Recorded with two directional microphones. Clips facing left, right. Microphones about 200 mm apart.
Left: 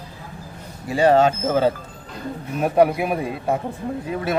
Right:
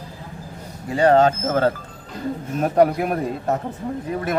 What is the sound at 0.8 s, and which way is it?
A man's voice, 10° left (ahead or behind).